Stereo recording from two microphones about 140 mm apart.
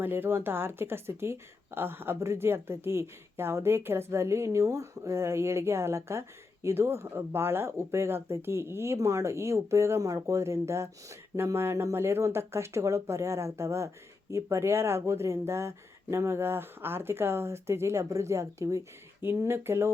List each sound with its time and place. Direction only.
0.0 s speech: 15° right (ahead or behind)